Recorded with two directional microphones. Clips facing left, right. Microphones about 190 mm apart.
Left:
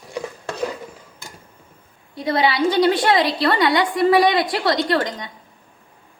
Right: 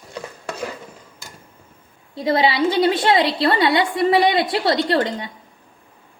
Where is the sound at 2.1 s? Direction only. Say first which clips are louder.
Right 1 dB; 25° right (ahead or behind).